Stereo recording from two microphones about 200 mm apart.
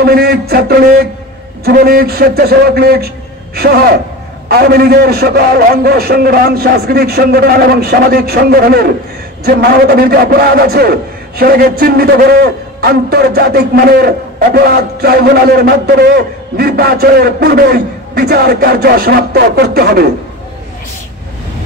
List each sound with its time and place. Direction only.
0.0 s a man's voice: 50° right (ahead or behind)